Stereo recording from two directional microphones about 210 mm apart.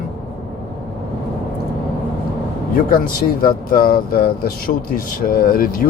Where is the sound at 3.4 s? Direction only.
45° left (ahead or behind).